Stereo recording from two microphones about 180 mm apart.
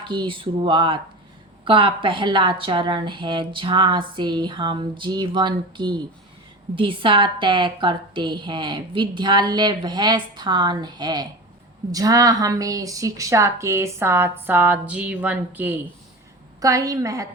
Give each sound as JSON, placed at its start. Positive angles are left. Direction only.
{"t": 0.1, "sound": "a woman's voice", "side_deg": -30}